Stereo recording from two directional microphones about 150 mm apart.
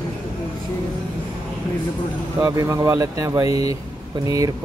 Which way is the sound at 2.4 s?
20° right (ahead or behind).